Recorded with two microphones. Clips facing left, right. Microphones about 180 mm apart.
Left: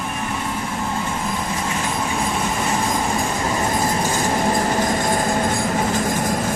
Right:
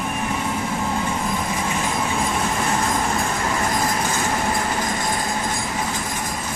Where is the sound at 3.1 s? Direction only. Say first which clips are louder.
Left 1 dB; 15° left (ahead or behind).